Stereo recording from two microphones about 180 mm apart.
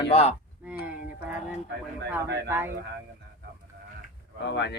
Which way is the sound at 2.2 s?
65° right (ahead or behind).